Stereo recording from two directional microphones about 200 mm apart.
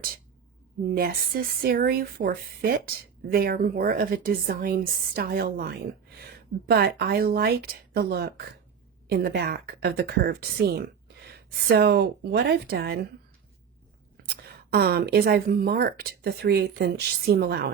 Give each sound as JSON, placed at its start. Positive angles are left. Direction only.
{"t": 0.9, "sound": "speech", "side_deg": -45}
{"t": 14.7, "sound": "speech", "side_deg": -50}